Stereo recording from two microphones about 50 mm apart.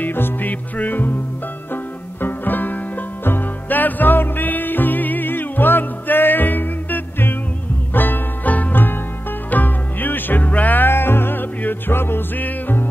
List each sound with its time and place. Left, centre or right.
0.0 s music: left